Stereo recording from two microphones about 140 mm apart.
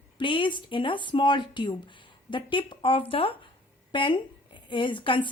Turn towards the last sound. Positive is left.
turn(degrees=35)  # may be behind; listen again after turning